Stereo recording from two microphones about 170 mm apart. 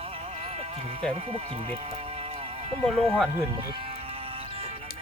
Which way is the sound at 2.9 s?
35° right (ahead or behind).